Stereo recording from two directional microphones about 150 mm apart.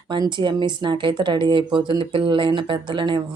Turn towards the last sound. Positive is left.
turn(degrees=-30)  # may be behind; listen again after turning